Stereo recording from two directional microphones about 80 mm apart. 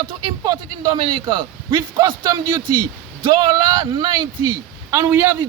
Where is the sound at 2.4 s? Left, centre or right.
Right.